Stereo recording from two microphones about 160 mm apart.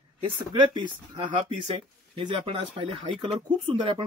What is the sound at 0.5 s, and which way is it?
Speech, 30° right (ahead or behind).